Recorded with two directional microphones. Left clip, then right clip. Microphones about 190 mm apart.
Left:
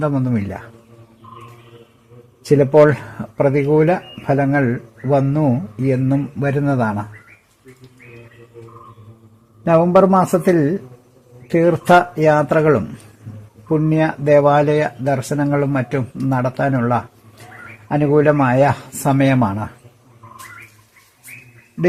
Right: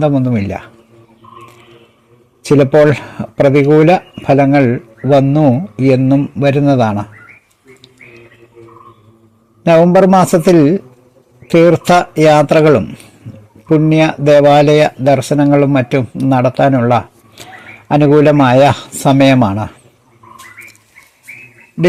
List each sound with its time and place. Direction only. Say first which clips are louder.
0.0 s speech: right 7 dB; 15° right (ahead or behind)
2.6 s speech: right 3 dB; 20° right (ahead or behind)
9.6 s speech: right 5 dB; 15° right (ahead or behind)